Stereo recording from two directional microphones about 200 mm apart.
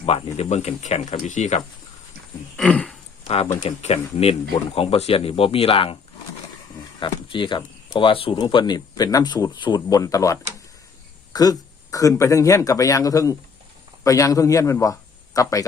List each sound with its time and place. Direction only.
0.0 s speech: 30° left (ahead or behind)
2.6 s a sound: 5° left (ahead or behind)
3.4 s speech: 15° left (ahead or behind)
3.8 s speech: 30° left (ahead or behind)
7.0 s a man's voice: 25° left (ahead or behind)